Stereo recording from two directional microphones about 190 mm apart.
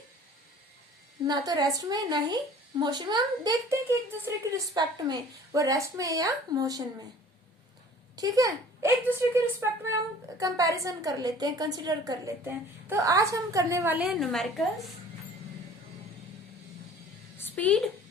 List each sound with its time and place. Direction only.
1.3 s a woman's voice: 20° right (ahead or behind)
8.1 s a woman's voice: 20° right (ahead or behind); by 14.4 s centre (ahead or behind)
17.3 s a sound: 10° left (ahead or behind)